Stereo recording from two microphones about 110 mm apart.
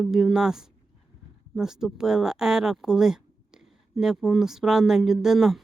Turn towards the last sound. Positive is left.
turn(degrees=0)  # may be behind; listen again after turning